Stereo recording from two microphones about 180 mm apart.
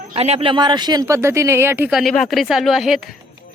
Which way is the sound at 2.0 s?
Centre (ahead or behind).